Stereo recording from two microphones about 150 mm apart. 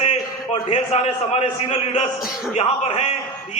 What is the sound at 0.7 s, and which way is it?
A man's voice, 40° left (ahead or behind).